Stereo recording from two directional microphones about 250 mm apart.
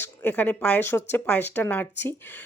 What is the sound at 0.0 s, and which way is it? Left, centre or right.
A woman's voice, centre.